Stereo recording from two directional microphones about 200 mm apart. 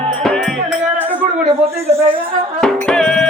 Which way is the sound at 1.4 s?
30° right (ahead or behind).